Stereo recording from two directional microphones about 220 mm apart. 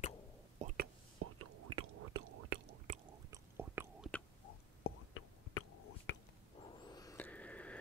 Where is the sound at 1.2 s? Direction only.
80° right.